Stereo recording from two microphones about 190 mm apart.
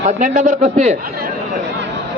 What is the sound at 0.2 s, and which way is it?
Speech, 40° right (ahead or behind).